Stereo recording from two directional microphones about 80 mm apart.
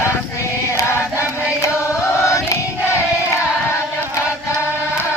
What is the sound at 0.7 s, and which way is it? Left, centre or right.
Choir, left.